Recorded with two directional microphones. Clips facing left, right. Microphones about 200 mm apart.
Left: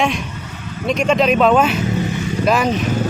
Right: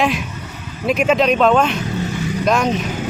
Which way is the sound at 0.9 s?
5° right (ahead or behind).